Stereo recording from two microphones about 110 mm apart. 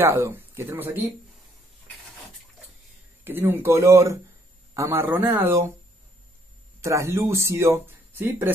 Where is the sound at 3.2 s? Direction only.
20° right (ahead or behind).